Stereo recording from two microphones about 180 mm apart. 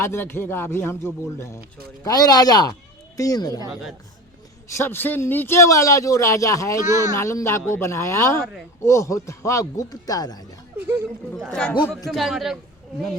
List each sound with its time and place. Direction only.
0.0 s speech: 15° left (ahead or behind)
3.7 s a man's voice: centre (ahead or behind)
4.7 s speech: 15° left (ahead or behind)
6.8 s speech: 15° right (ahead or behind)
7.2 s speech: 15° left (ahead or behind)
11.3 s a man's voice: centre (ahead or behind)